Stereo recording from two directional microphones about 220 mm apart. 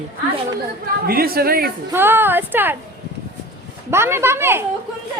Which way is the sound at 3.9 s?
10° right (ahead or behind).